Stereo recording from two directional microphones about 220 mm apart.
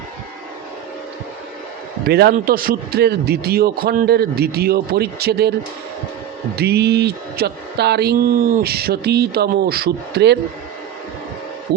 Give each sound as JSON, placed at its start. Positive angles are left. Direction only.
{"t": 2.0, "sound": "speech", "side_deg": -45}
{"t": 6.6, "sound": "speech", "side_deg": -50}